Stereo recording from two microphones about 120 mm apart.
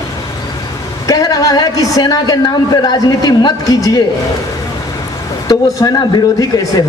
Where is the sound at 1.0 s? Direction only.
30° left (ahead or behind).